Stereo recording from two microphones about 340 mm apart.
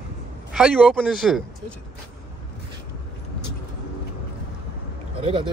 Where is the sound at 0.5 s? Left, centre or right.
Centre.